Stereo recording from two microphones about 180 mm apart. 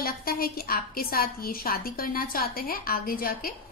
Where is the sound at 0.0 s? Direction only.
55° left (ahead or behind).